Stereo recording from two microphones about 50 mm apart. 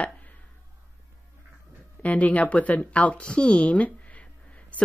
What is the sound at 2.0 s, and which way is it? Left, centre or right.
Speech, left.